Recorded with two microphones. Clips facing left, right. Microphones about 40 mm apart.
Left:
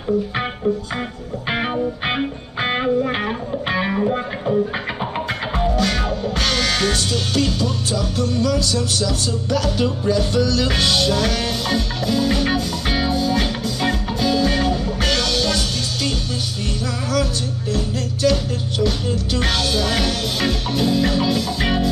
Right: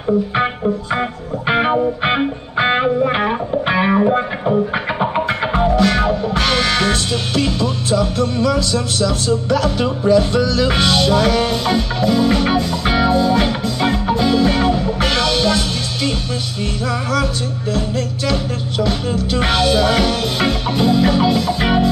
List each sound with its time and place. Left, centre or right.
1.5 s music: centre
5.8 s music: centre
17.7 s music: right